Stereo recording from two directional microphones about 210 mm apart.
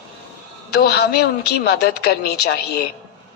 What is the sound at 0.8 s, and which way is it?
A woman's voice, 50° left (ahead or behind).